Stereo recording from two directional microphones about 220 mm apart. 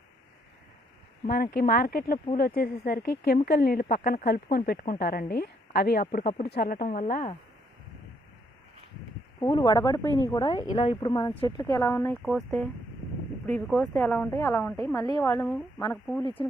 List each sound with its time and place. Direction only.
1.3 s a woman's voice: 40° left (ahead or behind)
2.1 s speech: 25° left (ahead or behind)
2.4 s a woman's voice: 40° left (ahead or behind)
9.4 s speech: 15° left (ahead or behind)
10.7 s speech: 30° left (ahead or behind)
11.0 s speech: 20° left (ahead or behind)
13.7 s speech: centre (ahead or behind)
14.9 s speech: 20° left (ahead or behind)
15.2 s speech: 5° left (ahead or behind)
16.2 s speech: 25° left (ahead or behind)